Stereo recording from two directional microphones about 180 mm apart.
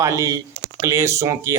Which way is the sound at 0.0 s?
15° right (ahead or behind).